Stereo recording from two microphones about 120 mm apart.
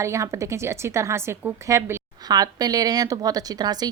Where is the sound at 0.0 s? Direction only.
25° right (ahead or behind).